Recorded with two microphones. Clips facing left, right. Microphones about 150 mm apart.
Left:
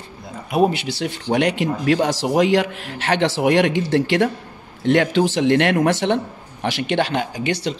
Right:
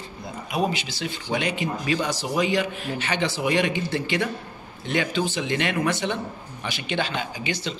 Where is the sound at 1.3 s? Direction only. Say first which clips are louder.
Left 7 dB; 80° left.